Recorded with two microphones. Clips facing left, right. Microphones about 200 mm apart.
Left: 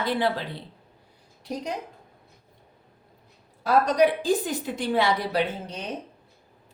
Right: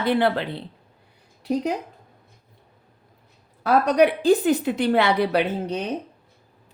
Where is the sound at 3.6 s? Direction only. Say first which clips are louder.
Right 3 dB; 65° right (ahead or behind).